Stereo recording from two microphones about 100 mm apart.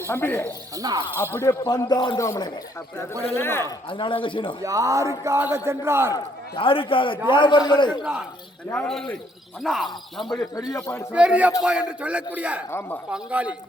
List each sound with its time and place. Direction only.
0.1 s speech: 25° left (ahead or behind)
0.4 s speech: 35° right (ahead or behind)
1.2 s speech: 30° left (ahead or behind)
1.9 s a man's voice: 50° left (ahead or behind)
2.1 s a man's voice: 30° left (ahead or behind)
3.8 s a man's voice: 55° left (ahead or behind)
4.6 s a man's voice: 30° right (ahead or behind)
6.6 s a man's voice: 60° left (ahead or behind)
8.7 s speech: 10° left (ahead or behind)
10.2 s a man's voice: 45° left (ahead or behind)
11.1 s a man's voice: 10° right (ahead or behind)